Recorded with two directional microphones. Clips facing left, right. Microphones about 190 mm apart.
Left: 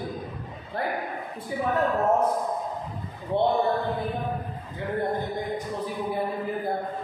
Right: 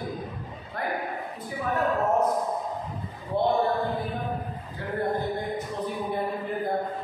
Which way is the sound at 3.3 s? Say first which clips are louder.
Left 2 dB; 25° left (ahead or behind).